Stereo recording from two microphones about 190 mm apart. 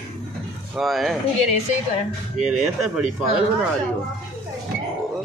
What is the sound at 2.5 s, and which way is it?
Speech, 5° right (ahead or behind).